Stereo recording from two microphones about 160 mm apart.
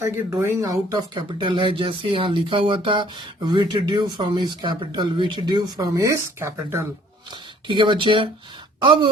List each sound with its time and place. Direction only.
0.0 s speech: 15° right (ahead or behind)
7.7 s speech: 30° right (ahead or behind)